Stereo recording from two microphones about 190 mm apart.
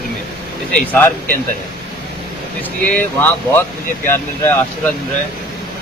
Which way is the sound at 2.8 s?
10° left (ahead or behind).